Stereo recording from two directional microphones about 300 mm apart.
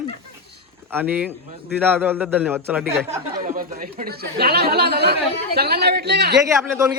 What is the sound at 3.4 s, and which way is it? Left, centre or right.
Speech, right.